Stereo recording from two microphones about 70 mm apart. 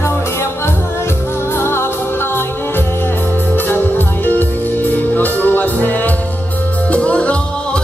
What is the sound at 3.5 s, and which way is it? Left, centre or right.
Music, left.